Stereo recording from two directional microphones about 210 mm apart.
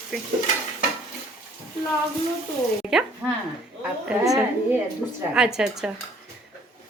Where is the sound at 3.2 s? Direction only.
5° right (ahead or behind).